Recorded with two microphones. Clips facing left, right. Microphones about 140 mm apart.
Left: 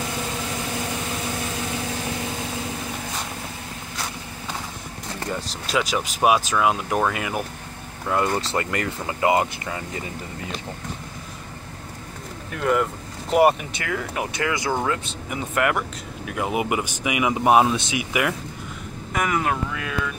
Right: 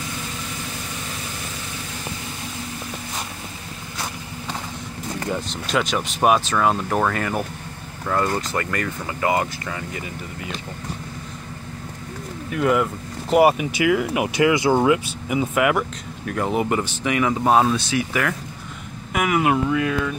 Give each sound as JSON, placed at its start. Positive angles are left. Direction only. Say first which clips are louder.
{"t": 5.7, "sound": "speech", "louder": "right 1 dB", "side_deg": 0}
{"t": 8.4, "sound": "speech", "louder": "even", "side_deg": 30}
{"t": 12.4, "sound": "speech", "louder": "right 2 dB", "side_deg": -5}
{"t": 16.3, "sound": "speech", "louder": "right 2 dB", "side_deg": 5}
{"t": 19.1, "sound": "speech", "louder": "right 4 dB", "side_deg": -10}